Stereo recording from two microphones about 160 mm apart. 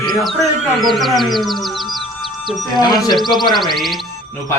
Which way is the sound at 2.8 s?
25° left (ahead or behind).